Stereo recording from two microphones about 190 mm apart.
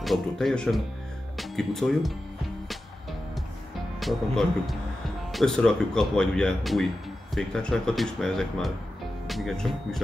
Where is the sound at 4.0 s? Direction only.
Centre (ahead or behind).